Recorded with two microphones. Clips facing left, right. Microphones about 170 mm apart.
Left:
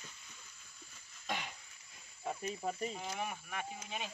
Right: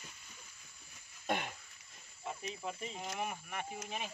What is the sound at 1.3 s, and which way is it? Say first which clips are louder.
Throat clearing: right 5 dB; 50° right (ahead or behind).